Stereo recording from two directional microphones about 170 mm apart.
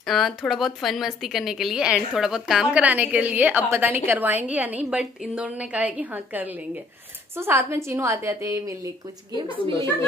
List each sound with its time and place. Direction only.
0.0 s a woman's voice: centre (ahead or behind); by 8.7 s 15° right (ahead or behind)